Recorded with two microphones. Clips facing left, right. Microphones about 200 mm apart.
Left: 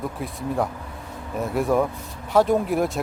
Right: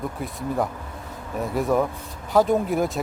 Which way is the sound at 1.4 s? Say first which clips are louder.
Left 1 dB; centre (ahead or behind).